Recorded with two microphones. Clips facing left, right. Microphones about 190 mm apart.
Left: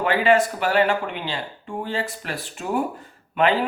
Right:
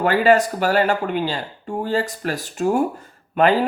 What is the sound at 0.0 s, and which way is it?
Speech, 40° right (ahead or behind).